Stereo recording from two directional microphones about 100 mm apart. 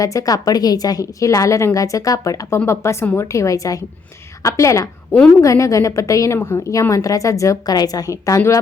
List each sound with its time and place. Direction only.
0.0 s a woman's voice: 35° left (ahead or behind)